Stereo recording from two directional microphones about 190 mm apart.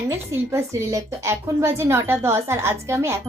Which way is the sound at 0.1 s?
15° right (ahead or behind).